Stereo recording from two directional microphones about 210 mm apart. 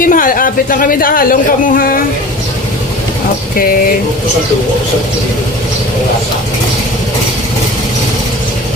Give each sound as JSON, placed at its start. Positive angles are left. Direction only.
{"t": 0.0, "sound": "speech", "side_deg": 40}